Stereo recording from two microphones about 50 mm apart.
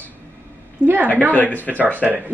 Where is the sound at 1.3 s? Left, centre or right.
Left.